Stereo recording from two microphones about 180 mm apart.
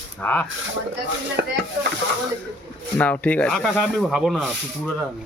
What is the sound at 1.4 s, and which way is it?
Speech, 75° right (ahead or behind).